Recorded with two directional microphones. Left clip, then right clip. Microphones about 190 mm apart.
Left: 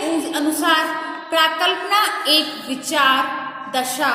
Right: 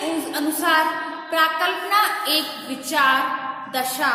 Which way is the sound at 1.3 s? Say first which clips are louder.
Left 3 dB; 20° left (ahead or behind).